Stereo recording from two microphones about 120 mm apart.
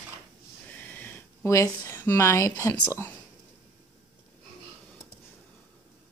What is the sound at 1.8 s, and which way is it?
Speech, 15° left (ahead or behind).